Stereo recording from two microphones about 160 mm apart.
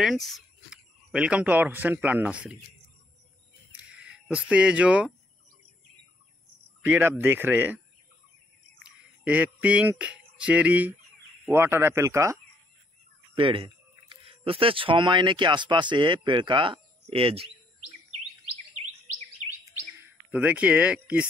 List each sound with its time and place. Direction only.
0.0 s speech: centre (ahead or behind)
3.7 s a sound: 5° right (ahead or behind)
6.8 s speech: 15° right (ahead or behind)
9.2 s speech: 10° right (ahead or behind)
13.3 s speech: 30° right (ahead or behind)
20.2 s speech: 10° right (ahead or behind)